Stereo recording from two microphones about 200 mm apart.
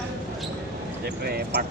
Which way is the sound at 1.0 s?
55° right (ahead or behind).